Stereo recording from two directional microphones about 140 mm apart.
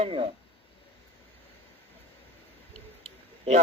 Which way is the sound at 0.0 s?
40° right (ahead or behind).